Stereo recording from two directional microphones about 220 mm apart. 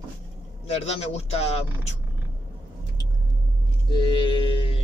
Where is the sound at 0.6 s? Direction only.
30° left (ahead or behind).